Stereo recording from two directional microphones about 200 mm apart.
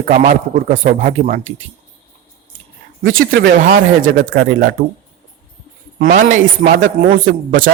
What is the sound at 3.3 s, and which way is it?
Speech, 50° right (ahead or behind).